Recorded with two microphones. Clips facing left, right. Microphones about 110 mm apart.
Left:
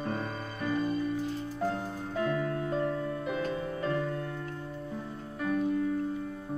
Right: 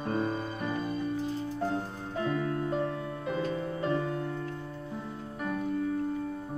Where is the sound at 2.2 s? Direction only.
20° right (ahead or behind).